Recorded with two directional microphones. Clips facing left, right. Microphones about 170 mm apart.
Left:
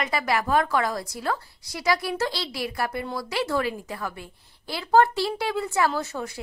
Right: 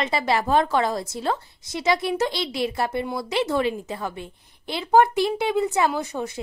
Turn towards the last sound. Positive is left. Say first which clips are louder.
# right 2 dB
turn(degrees=-20)  # may be behind; listen again after turning